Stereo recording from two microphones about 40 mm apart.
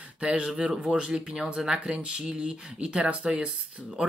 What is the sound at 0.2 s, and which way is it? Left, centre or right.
Speech, right.